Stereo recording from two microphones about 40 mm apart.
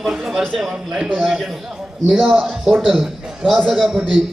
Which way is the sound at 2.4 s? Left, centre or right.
Centre.